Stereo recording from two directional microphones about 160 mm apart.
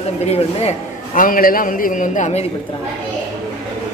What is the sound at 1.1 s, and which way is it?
A man's voice, 60° left (ahead or behind).